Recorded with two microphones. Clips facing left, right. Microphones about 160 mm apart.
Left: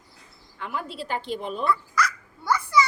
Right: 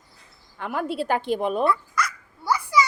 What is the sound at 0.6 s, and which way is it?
A woman's voice, 55° right (ahead or behind).